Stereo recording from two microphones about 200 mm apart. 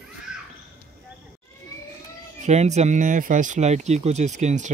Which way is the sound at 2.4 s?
35° right (ahead or behind).